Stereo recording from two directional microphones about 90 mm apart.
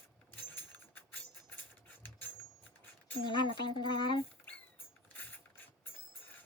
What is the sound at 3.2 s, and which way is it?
Speech, 60° left (ahead or behind).